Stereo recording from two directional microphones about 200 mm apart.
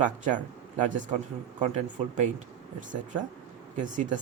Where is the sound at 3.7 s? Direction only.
40° right (ahead or behind).